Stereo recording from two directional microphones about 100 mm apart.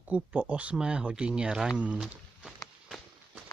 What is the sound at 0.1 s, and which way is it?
Speech, 15° right (ahead or behind).